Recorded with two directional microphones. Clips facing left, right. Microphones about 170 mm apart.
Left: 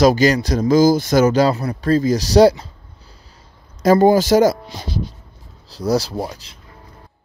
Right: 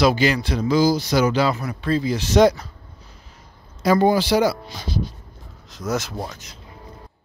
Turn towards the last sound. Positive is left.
turn(degrees=30)  # may be behind; listen again after turning